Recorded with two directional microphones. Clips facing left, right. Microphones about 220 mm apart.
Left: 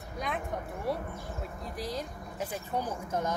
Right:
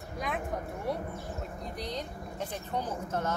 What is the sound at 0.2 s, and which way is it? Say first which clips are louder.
Speech: right 1 dB; centre (ahead or behind).